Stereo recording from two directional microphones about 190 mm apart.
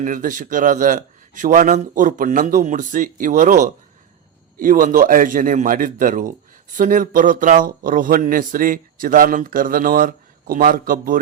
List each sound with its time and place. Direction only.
0.0 s speech: 45° right (ahead or behind)